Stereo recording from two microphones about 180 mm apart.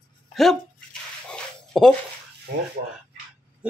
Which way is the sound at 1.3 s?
5° left (ahead or behind).